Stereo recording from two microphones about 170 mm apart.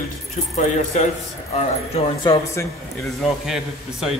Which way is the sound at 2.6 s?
15° left (ahead or behind).